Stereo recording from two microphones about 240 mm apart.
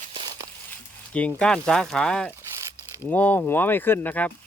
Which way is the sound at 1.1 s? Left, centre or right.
Centre.